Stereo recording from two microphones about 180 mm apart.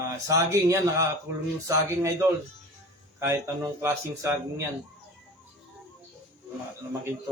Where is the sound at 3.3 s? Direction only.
15° right (ahead or behind).